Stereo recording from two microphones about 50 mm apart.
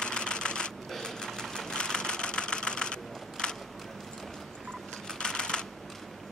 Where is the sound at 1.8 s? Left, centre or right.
Centre.